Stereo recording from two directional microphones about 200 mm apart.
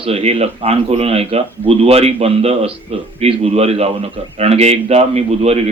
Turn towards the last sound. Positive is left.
turn(degrees=-30)  # may be behind; listen again after turning